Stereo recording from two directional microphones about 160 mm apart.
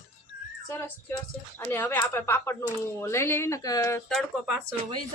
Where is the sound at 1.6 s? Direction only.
10° left (ahead or behind).